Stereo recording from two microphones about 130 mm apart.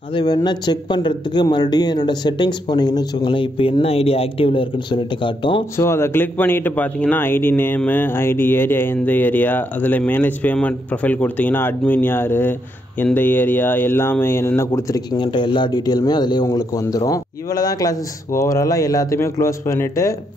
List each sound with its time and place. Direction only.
0.1 s speech: 30° left (ahead or behind)
5.8 s a man's voice: 20° left (ahead or behind)
15.1 s speech: 35° left (ahead or behind)